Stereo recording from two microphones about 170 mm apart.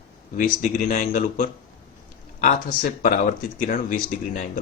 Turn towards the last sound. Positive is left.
turn(degrees=50)  # may be behind; listen again after turning